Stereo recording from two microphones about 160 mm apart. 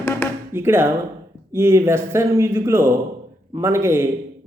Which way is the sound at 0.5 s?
15° right (ahead or behind).